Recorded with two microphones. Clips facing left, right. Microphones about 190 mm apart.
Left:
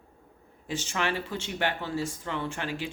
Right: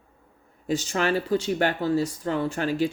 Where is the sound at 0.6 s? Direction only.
40° right (ahead or behind).